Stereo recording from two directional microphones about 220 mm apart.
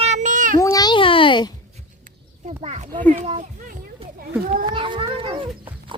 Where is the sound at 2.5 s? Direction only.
30° right (ahead or behind).